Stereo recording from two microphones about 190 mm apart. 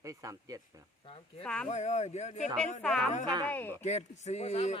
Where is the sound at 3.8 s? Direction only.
35° left (ahead or behind).